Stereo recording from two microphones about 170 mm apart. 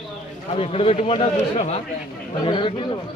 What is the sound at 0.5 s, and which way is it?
A man's voice, 35° left (ahead or behind).